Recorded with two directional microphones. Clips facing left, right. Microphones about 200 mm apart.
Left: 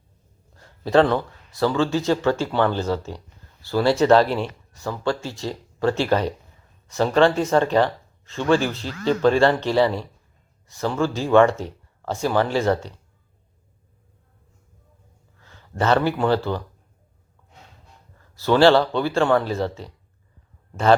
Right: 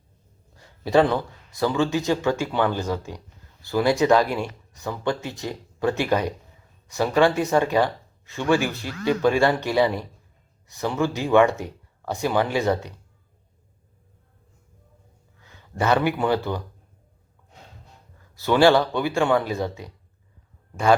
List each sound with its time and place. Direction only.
0.9 s speech: 15° right (ahead or behind)
15.4 s speech: 15° right (ahead or behind)
18.3 s speech: 15° right (ahead or behind)